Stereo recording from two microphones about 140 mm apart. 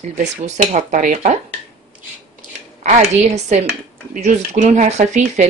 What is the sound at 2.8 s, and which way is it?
Speech, 55° right (ahead or behind).